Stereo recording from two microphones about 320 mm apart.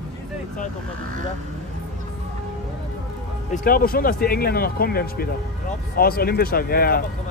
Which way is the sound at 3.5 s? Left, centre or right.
Left.